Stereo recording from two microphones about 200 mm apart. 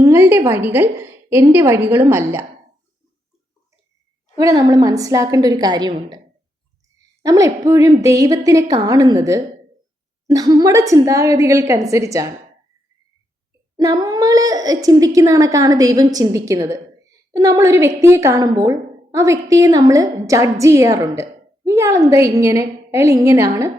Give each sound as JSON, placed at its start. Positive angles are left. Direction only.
{"t": 0.0, "sound": "a woman's voice", "side_deg": -10}
{"t": 4.4, "sound": "a woman's voice", "side_deg": -15}
{"t": 7.2, "sound": "speech", "side_deg": -15}
{"t": 13.7, "sound": "speech", "side_deg": -20}